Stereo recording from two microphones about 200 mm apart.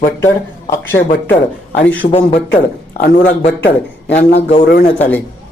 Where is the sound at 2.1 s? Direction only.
30° left (ahead or behind).